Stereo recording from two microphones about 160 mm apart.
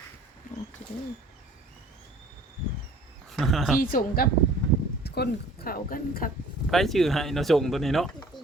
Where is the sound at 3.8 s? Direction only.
65° left (ahead or behind).